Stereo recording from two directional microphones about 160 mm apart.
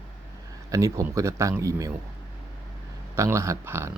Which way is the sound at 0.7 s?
20° right (ahead or behind).